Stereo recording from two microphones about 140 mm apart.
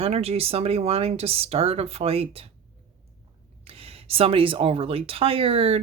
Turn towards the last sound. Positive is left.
turn(degrees=-45)  # may be behind; listen again after turning